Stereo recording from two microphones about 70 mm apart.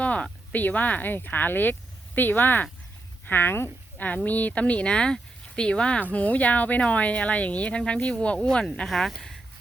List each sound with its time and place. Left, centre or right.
0.0 s speech: centre